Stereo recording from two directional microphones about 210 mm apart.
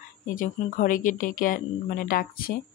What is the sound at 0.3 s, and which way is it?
Speech, 40° left (ahead or behind).